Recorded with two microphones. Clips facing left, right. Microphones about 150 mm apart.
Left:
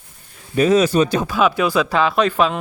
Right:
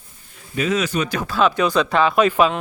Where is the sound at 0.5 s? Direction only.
40° left (ahead or behind).